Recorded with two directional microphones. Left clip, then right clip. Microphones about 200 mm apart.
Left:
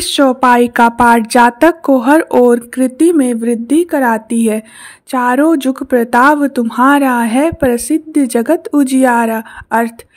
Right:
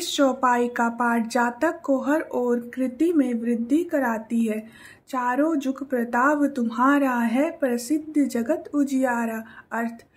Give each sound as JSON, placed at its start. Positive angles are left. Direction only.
{"t": 0.0, "sound": "speech", "side_deg": 40}